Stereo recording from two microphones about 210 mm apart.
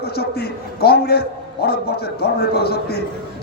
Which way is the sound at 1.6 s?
50° left (ahead or behind).